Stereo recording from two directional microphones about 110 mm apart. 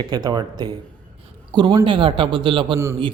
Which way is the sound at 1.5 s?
50° right (ahead or behind).